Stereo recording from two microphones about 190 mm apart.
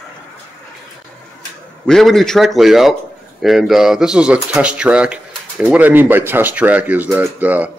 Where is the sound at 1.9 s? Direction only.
Centre (ahead or behind).